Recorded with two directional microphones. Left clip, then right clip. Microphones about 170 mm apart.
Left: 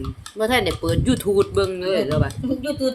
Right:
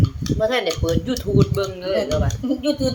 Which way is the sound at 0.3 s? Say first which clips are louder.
Even; 75° left (ahead or behind).